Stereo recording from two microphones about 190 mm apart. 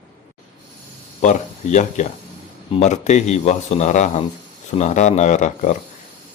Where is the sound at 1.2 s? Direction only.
40° left (ahead or behind).